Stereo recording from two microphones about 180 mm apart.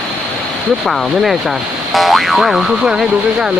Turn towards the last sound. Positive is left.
turn(degrees=0)  # may be behind; listen again after turning